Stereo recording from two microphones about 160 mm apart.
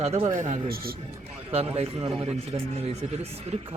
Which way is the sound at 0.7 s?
70° right (ahead or behind).